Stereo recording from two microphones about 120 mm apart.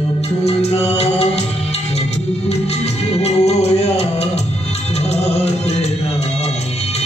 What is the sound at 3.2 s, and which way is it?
Music, 60° left (ahead or behind).